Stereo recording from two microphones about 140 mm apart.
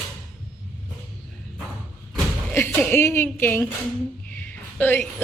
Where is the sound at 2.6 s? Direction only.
15° left (ahead or behind).